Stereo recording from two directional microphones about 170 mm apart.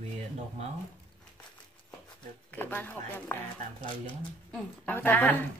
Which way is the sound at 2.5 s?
10° left (ahead or behind).